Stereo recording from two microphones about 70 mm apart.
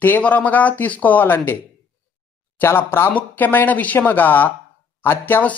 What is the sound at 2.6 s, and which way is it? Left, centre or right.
Speech, left.